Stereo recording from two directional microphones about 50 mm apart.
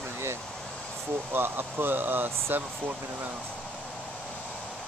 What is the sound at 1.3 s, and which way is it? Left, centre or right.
Speech, right.